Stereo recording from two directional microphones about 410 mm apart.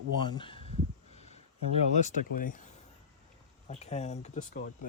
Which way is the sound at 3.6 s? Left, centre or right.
Centre.